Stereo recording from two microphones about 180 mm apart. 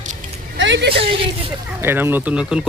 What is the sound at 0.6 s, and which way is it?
Speech, 80° right.